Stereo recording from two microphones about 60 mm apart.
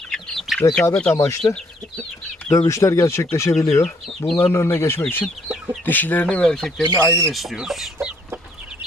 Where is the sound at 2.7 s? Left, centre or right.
Left.